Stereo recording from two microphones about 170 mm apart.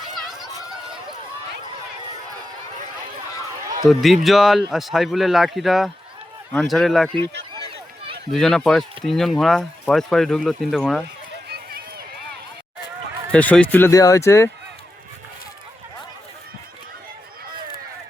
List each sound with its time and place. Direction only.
0.2 s a sound: centre (ahead or behind)
3.8 s speech: centre (ahead or behind)
8.3 s speech: centre (ahead or behind)
11.4 s run: 65° right (ahead or behind)
13.3 s speech: 5° left (ahead or behind)